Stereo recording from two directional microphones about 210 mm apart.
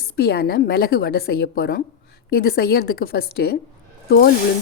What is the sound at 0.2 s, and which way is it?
Speech, 50° left (ahead or behind).